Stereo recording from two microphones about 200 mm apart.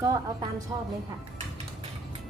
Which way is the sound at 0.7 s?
20° right (ahead or behind).